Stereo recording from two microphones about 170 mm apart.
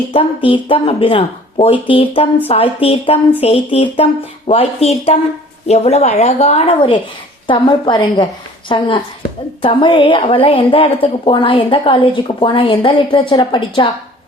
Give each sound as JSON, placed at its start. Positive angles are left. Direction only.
{"t": 0.1, "sound": "a woman's voice", "side_deg": 30}